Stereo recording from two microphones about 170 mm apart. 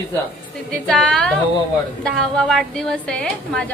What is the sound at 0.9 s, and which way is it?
A woman's voice, 5° left (ahead or behind).